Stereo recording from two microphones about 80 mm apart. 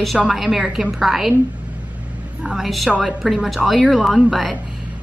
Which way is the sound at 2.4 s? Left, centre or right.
Centre.